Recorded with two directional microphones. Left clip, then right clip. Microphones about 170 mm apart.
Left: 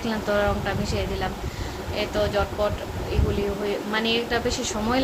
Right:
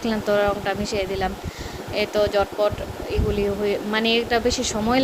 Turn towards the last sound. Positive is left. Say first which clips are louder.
# right 3 dB
turn(degrees=-45)  # may be behind; listen again after turning